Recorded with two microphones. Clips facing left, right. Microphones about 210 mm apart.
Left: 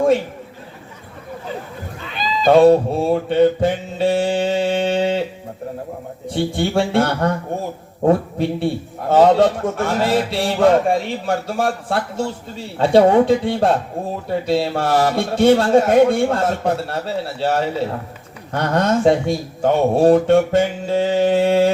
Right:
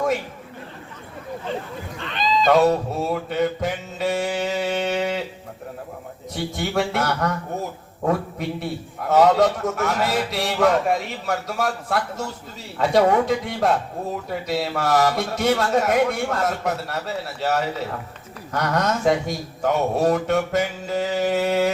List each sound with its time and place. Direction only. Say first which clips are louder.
2.0 s a sound: right 2 dB; 5° left (ahead or behind)
2.5 s mantra: left 8 dB; 30° left (ahead or behind)
6.2 s a man's voice: left 7 dB; 30° left (ahead or behind)